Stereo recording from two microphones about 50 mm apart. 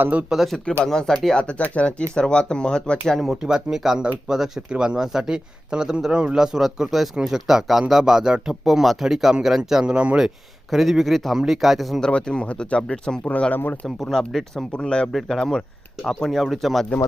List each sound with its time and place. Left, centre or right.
0.0 s speech: right
0.3 s speech: centre
0.9 s speech: centre
1.4 s a man's voice: left
3.4 s speech: centre
9.8 s speech: right
10.2 s speech: centre
11.9 s a man's voice: centre
13.5 s speech: left
13.8 s speech: centre
14.7 s a man's voice: centre
15.1 s speech: centre